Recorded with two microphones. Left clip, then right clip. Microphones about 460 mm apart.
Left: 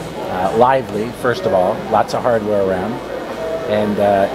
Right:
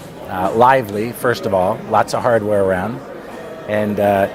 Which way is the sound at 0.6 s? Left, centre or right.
Right.